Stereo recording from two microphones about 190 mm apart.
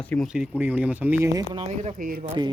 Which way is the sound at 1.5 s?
30° right (ahead or behind).